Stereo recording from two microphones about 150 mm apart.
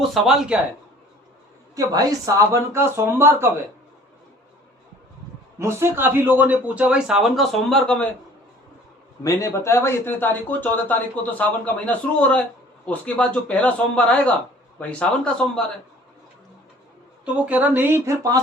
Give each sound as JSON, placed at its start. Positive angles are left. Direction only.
{"t": 0.1, "sound": "speech", "side_deg": -5}
{"t": 1.7, "sound": "speech", "side_deg": -25}
{"t": 5.5, "sound": "a man's voice", "side_deg": -15}
{"t": 9.2, "sound": "speech", "side_deg": 20}
{"t": 17.2, "sound": "a man's voice", "side_deg": -10}